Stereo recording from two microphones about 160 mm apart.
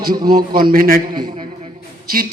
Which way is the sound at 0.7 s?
65° right (ahead or behind).